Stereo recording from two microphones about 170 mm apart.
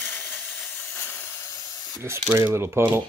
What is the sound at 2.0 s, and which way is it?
Speech, 15° right (ahead or behind).